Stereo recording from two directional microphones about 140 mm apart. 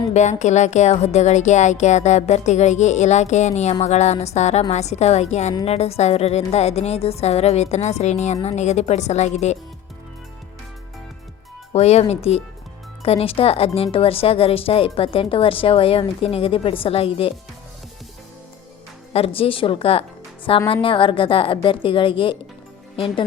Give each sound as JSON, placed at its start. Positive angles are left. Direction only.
{"t": 0.1, "sound": "speech", "side_deg": 60}
{"t": 11.7, "sound": "speech", "side_deg": 50}
{"t": 19.1, "sound": "a woman's voice", "side_deg": 40}